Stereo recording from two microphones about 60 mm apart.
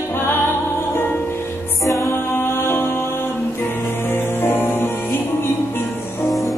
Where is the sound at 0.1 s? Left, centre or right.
Left.